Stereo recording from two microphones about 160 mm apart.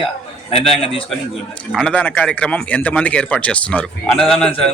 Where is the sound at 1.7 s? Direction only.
5° left (ahead or behind).